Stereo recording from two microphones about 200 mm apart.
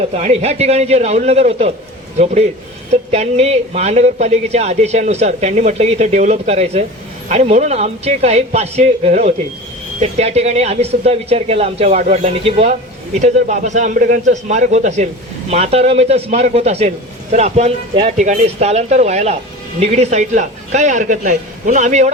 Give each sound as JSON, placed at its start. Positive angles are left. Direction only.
{"t": 0.1, "sound": "speech", "side_deg": -35}